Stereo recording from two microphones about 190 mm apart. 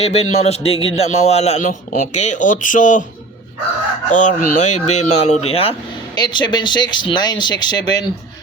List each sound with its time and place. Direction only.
0.0 s a man's voice: 30° left (ahead or behind)
4.1 s a man's voice: 40° left (ahead or behind); by 8.0 s 20° left (ahead or behind)